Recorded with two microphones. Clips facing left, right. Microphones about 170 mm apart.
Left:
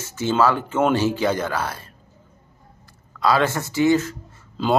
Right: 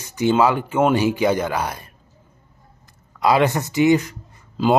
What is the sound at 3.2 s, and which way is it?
Speech, 20° right (ahead or behind).